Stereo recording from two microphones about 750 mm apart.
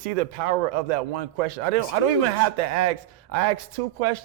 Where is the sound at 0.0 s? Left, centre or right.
Right.